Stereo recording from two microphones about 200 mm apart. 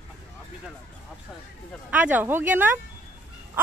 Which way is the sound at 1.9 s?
10° right (ahead or behind).